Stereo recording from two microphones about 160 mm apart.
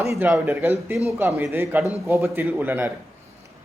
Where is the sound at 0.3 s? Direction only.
5° right (ahead or behind).